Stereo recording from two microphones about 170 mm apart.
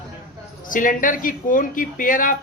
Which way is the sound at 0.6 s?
50° left (ahead or behind).